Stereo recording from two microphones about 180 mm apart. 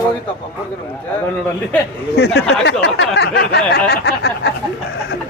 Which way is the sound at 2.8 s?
70° left (ahead or behind).